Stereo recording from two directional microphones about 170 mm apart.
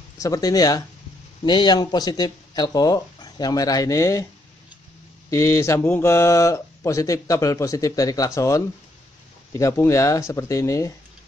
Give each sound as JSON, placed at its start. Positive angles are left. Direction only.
{"t": 0.2, "sound": "speech", "side_deg": 20}
{"t": 5.3, "sound": "speech", "side_deg": 15}